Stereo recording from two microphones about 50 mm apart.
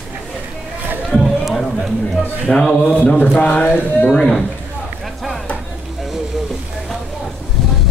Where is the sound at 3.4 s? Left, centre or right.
Left.